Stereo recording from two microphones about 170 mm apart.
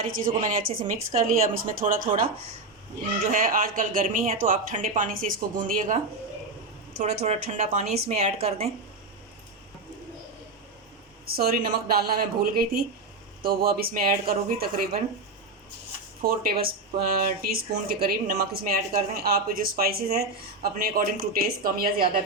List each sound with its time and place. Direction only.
0.3 s speech: 50° right (ahead or behind)
3.3 s speech: 55° right (ahead or behind)
7.3 s speech: 40° right (ahead or behind)
11.3 s speech: 60° right (ahead or behind)
16.2 s speech: 60° right (ahead or behind)